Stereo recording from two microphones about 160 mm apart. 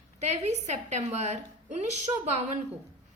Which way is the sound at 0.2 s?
45° right (ahead or behind).